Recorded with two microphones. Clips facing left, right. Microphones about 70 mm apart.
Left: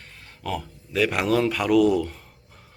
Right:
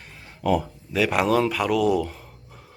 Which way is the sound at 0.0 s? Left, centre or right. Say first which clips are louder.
Right 8 dB; centre.